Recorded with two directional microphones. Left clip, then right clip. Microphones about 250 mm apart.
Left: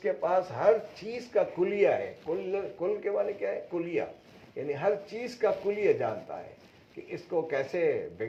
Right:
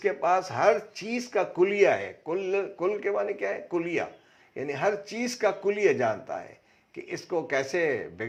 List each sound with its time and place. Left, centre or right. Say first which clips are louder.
0.0 s a man's voice: right 3 dB; right